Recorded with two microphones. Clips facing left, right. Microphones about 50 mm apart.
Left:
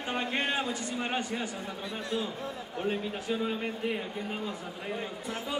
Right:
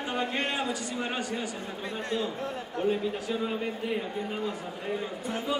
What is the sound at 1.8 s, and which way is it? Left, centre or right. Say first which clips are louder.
Speech: right 2 dB; right.